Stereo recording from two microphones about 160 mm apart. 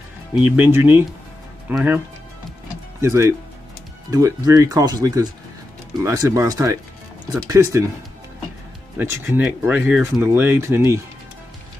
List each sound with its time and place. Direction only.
0.3 s speech: 15° right (ahead or behind)
3.0 s speech: 15° right (ahead or behind)
8.9 s speech: 15° right (ahead or behind)